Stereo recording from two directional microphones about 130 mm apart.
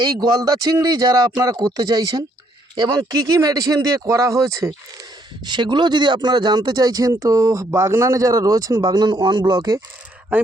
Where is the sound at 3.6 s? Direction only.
25° right (ahead or behind).